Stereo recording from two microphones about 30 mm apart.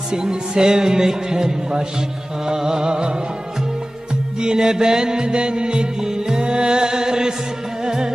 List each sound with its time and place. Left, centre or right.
0.1 s a man's voice: right
4.4 s music: right